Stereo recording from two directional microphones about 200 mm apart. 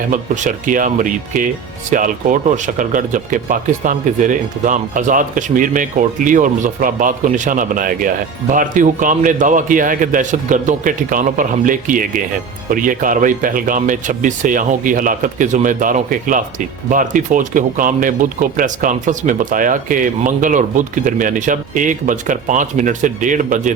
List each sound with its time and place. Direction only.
0.1 s speech: 40° right (ahead or behind)